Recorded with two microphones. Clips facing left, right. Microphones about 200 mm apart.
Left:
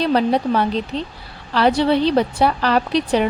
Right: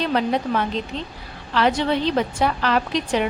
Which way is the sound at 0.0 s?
35° left (ahead or behind).